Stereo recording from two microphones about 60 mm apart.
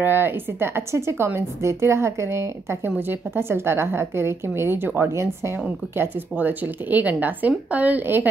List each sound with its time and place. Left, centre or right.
0.0 s a woman's voice: right
5.9 s speech: right